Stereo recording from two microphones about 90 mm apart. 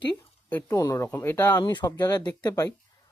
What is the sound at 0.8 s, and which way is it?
Speech, 40° left (ahead or behind).